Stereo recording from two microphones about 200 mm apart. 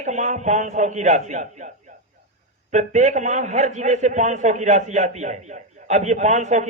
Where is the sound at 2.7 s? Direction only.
35° right (ahead or behind).